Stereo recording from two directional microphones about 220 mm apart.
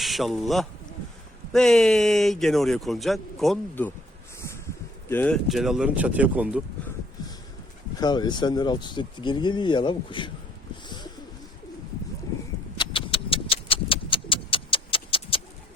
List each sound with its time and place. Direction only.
0.0 s a man's voice: centre (ahead or behind)
5.0 s a man's voice: 5° left (ahead or behind)
7.9 s speech: 20° left (ahead or behind)
10.8 s bird: 20° left (ahead or behind)
12.8 s vehicle: 25° left (ahead or behind)